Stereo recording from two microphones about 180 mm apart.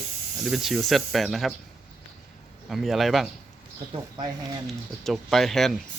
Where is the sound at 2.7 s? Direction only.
Centre (ahead or behind).